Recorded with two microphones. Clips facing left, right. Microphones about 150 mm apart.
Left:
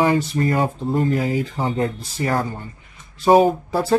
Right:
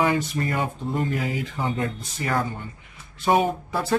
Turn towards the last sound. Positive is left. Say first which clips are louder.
# left 7 dB
turn(degrees=35)  # may be behind; listen again after turning